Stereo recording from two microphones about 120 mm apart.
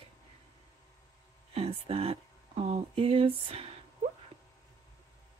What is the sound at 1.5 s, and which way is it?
Speech, 55° right (ahead or behind).